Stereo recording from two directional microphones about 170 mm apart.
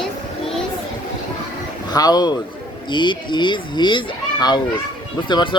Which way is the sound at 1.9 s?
20° left (ahead or behind).